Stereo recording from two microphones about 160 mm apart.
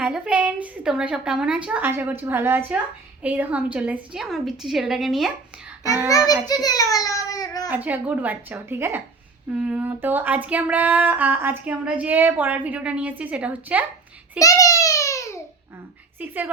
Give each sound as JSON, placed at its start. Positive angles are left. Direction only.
{"t": 0.0, "sound": "a woman's voice", "side_deg": -5}
{"t": 6.1, "sound": "a child's voice", "side_deg": 20}
{"t": 7.7, "sound": "a woman's voice", "side_deg": -10}
{"t": 14.3, "sound": "a sound", "side_deg": 20}
{"t": 16.1, "sound": "a woman's voice", "side_deg": -10}